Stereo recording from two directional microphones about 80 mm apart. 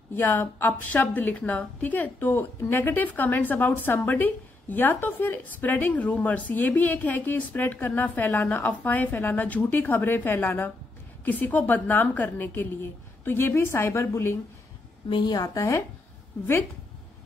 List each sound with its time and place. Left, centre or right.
0.1 s a woman's voice: left
15.0 s a woman's voice: left